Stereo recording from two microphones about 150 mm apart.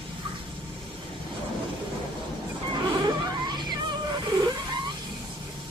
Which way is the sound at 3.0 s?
30° right (ahead or behind).